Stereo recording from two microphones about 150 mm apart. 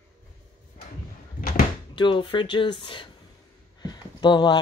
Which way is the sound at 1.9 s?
30° left (ahead or behind).